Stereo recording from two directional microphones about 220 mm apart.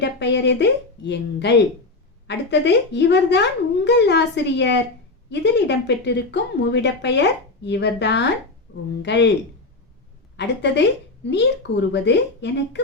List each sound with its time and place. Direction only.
0.0 s speech: 50° left (ahead or behind)
10.3 s speech: 50° left (ahead or behind)